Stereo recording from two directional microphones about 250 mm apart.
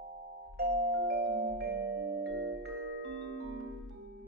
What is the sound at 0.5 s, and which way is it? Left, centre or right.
Music, right.